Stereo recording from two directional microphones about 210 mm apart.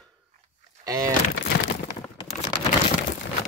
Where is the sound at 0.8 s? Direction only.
15° right (ahead or behind).